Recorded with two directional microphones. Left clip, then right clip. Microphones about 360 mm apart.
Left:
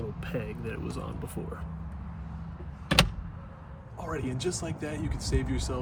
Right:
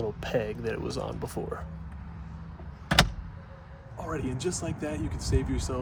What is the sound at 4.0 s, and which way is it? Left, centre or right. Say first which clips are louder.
Speech: right 1 dB; centre.